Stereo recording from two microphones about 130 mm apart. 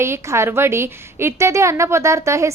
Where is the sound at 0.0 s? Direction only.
20° right (ahead or behind).